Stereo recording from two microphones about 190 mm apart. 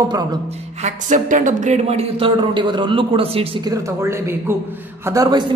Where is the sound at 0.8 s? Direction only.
40° right (ahead or behind).